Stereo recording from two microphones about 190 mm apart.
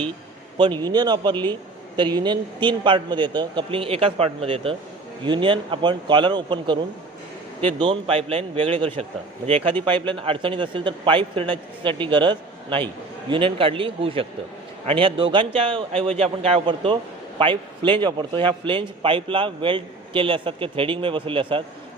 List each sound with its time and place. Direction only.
0.5 s a man's voice: 25° right (ahead or behind)
7.8 s a man's voice: 25° right (ahead or behind)